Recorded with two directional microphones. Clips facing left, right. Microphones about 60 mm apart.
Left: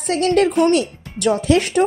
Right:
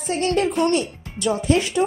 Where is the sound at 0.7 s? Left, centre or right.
Left.